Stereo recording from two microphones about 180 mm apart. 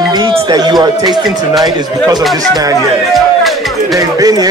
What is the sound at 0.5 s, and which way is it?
Speech, 25° right (ahead or behind).